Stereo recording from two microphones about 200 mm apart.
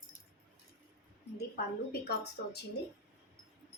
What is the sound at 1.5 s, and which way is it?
A woman's voice, 55° left (ahead or behind).